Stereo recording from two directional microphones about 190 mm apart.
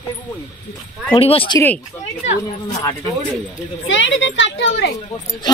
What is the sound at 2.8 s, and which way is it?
Speech, 20° left (ahead or behind).